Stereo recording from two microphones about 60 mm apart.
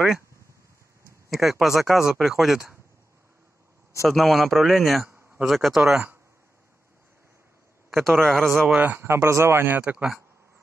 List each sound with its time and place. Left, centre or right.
1.3 s speech: centre
4.1 s speech: centre
5.8 s speech: centre
7.9 s a man's voice: centre
8.7 s speech: right
9.0 s speech: right